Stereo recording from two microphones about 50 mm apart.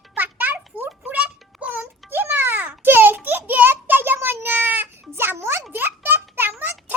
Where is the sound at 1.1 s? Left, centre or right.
Right.